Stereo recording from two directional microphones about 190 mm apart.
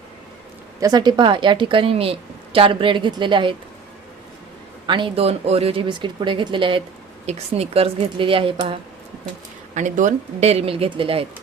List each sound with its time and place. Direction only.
0.8 s a woman's voice: 20° right (ahead or behind)
4.9 s a woman's voice: 25° right (ahead or behind)
9.7 s speech: 40° right (ahead or behind)